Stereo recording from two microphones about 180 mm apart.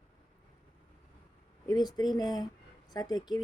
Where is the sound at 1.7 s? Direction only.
20° left (ahead or behind).